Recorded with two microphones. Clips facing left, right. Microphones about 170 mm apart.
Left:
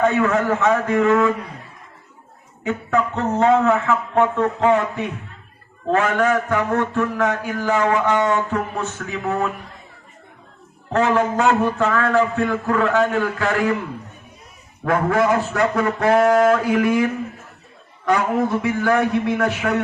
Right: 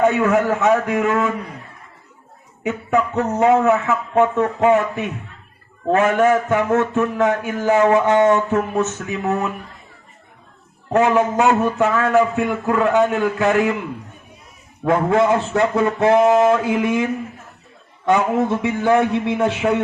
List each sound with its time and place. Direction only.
0.0 s a man's voice: 20° right (ahead or behind)
2.6 s a man's voice: 20° right (ahead or behind)
10.9 s a man's voice: 20° right (ahead or behind)
14.8 s a man's voice: 25° right (ahead or behind)